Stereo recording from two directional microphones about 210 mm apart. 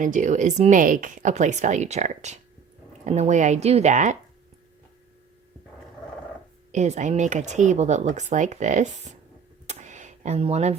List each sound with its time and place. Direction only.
0.0 s speech: 35° right (ahead or behind)
6.7 s speech: 35° right (ahead or behind)
9.6 s a sound: 35° right (ahead or behind)